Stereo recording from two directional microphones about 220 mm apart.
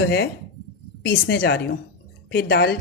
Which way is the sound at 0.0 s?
50° left (ahead or behind).